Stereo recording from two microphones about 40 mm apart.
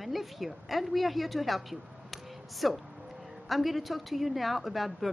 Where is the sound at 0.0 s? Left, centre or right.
Centre.